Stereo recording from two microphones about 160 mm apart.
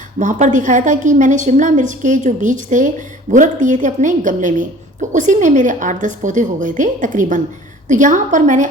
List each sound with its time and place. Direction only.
0.2 s a woman's voice: 50° right (ahead or behind)